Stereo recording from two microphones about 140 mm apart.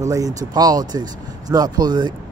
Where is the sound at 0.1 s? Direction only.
25° right (ahead or behind).